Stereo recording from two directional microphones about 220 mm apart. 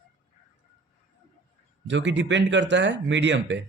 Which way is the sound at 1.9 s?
55° right (ahead or behind).